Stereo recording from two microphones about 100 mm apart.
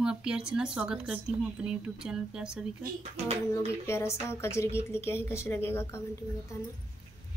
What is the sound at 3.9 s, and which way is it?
Speech, 25° left (ahead or behind).